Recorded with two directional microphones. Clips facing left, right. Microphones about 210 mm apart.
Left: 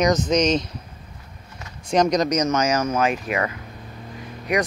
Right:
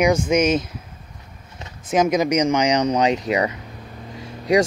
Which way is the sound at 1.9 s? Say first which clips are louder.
Right 1 dB; 5° right (ahead or behind).